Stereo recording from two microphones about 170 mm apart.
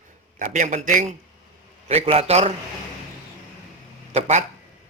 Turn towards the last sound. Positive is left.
turn(degrees=-40)  # may be behind; listen again after turning